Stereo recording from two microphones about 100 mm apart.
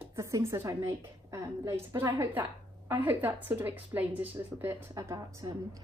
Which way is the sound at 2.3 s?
20° right (ahead or behind).